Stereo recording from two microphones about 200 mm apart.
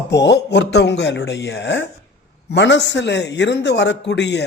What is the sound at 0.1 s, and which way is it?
A man's voice, 60° left (ahead or behind).